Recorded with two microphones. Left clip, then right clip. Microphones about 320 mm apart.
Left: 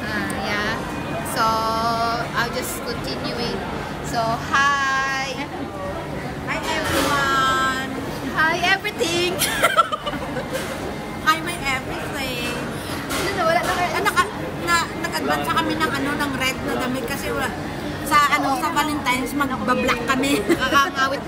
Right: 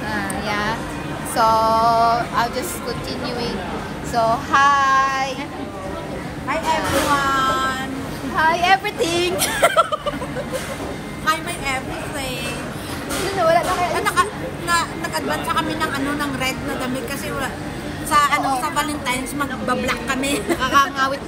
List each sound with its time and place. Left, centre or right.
0.1 s a sound: centre
1.3 s music: centre
4.1 s speech: centre
6.5 s vehicle: centre
8.4 s speech: centre
11.2 s a sound: centre
13.5 s speech: centre
18.1 s a woman's voice: centre
20.5 s speech: centre